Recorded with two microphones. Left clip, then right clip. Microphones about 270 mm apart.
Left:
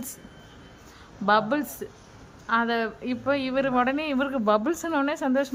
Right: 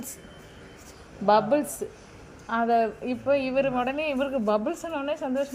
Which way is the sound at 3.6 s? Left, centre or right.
Left.